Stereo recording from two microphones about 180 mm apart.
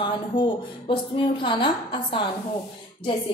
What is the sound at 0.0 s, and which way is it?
A woman's voice, 25° left (ahead or behind).